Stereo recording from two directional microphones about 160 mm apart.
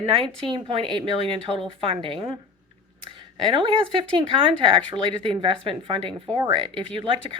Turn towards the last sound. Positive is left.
turn(degrees=-30)  # may be behind; listen again after turning